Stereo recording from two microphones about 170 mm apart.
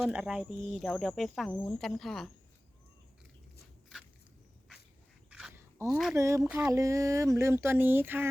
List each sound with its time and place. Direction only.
0.0 s speech: 5° right (ahead or behind)
5.3 s dog: 5° right (ahead or behind)
5.8 s speech: 20° right (ahead or behind)
6.7 s speech: 20° right (ahead or behind)